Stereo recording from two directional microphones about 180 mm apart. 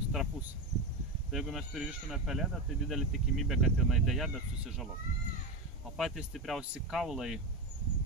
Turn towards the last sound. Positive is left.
turn(degrees=-5)  # may be behind; listen again after turning